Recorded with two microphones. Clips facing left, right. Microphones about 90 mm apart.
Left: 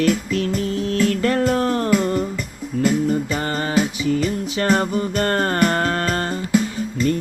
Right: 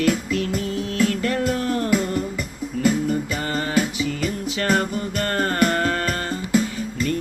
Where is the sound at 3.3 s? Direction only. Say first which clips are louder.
Left 2 dB; 35° left (ahead or behind).